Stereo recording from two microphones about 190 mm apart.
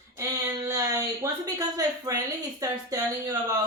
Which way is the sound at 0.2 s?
15° right (ahead or behind).